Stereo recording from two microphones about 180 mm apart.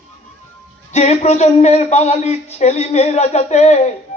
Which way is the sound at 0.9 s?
35° left (ahead or behind).